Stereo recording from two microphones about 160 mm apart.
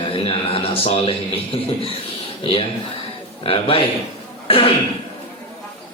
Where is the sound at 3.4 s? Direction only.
35° left (ahead or behind).